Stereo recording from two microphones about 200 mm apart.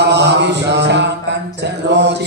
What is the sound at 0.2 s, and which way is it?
Mantra, 60° right (ahead or behind).